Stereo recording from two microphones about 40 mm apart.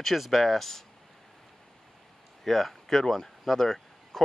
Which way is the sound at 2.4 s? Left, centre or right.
Centre.